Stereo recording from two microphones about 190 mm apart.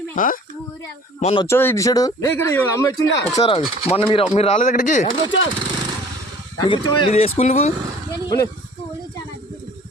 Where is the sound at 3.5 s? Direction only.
30° left (ahead or behind).